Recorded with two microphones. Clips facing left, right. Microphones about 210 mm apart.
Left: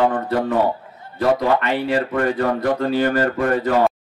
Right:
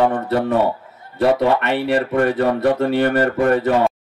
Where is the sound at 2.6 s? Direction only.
65° right (ahead or behind).